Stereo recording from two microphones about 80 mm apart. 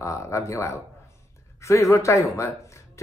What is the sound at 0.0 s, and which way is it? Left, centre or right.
Speech, left.